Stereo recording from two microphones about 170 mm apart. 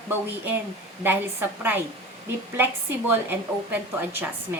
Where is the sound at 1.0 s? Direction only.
10° right (ahead or behind).